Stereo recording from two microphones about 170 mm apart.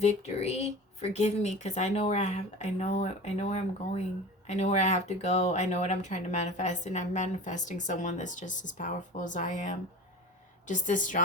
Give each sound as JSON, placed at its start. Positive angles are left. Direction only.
{"t": 0.0, "sound": "speech", "side_deg": 40}